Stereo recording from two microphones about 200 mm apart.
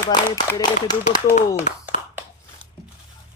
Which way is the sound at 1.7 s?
35° left (ahead or behind).